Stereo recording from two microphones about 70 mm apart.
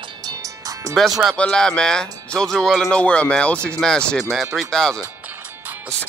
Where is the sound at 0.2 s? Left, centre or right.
Right.